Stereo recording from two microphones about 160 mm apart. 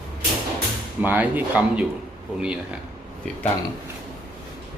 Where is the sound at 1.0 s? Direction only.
10° right (ahead or behind).